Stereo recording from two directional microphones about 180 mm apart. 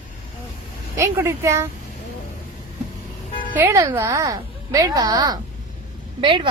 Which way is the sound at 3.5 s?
15° right (ahead or behind).